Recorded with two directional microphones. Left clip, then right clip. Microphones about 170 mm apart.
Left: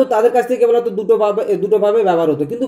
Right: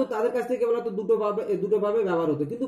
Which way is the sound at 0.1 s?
20° right (ahead or behind).